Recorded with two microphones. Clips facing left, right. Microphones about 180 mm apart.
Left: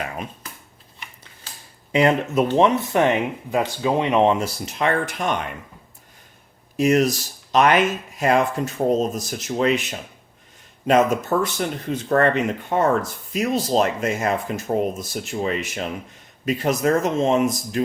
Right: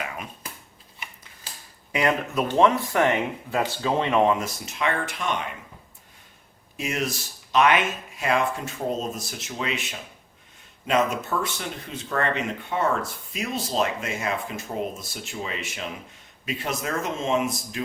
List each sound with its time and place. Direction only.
1.9 s speech: 25° left (ahead or behind)
6.7 s speech: 40° left (ahead or behind)